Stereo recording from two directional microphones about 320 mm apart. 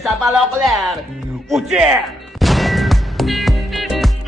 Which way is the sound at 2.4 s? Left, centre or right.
Centre.